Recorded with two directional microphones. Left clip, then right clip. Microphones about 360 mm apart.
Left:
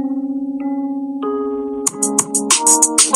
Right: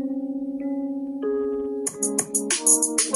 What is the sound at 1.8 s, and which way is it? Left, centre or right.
Music, right.